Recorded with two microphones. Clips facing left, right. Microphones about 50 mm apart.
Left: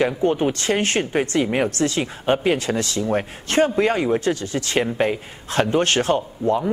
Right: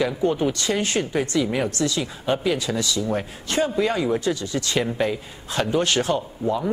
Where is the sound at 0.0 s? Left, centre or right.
Left.